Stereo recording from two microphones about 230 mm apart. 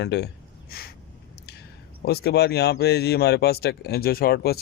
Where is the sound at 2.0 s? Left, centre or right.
Left.